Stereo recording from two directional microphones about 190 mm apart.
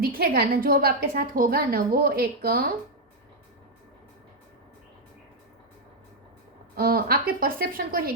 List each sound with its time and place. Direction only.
0.0 s a woman's voice: 50° right (ahead or behind)
6.7 s a woman's voice: 50° right (ahead or behind)